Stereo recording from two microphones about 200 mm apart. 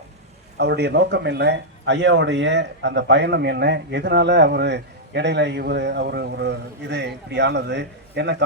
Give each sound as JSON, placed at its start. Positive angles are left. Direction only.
{"t": 0.5, "sound": "a man's voice", "side_deg": -55}